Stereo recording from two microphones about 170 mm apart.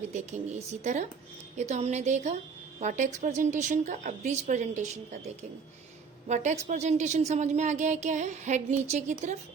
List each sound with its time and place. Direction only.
0.1 s speech: 40° right (ahead or behind)
6.2 s speech: 45° right (ahead or behind)